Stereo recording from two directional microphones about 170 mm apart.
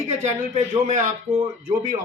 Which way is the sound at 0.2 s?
40° right (ahead or behind).